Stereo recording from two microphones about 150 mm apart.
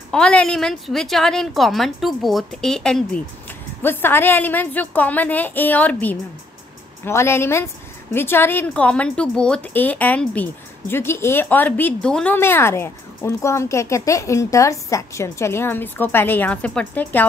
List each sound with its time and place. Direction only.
0.1 s a woman's voice: 5° left (ahead or behind)
12.4 s a woman's voice: 15° left (ahead or behind)